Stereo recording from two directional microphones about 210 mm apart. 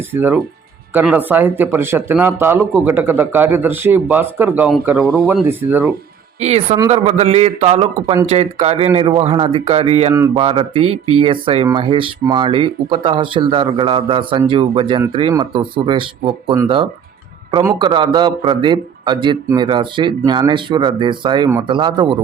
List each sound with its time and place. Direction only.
0.1 s speech: 10° right (ahead or behind)
6.4 s a man's voice: 30° right (ahead or behind)
10.9 s speech: 90° right
11.2 s a man's voice: 25° right (ahead or behind)